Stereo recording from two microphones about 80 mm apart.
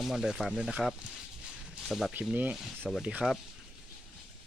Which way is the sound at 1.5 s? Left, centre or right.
Centre.